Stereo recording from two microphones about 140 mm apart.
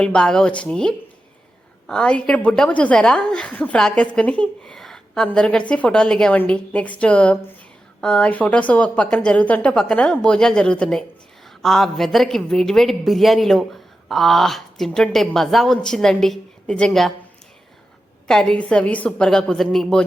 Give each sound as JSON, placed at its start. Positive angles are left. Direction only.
{"t": 0.0, "sound": "a woman's voice", "side_deg": 5}
{"t": 18.3, "sound": "speech", "side_deg": 5}